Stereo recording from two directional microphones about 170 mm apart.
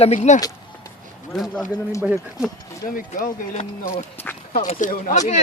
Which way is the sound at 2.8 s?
55° left (ahead or behind).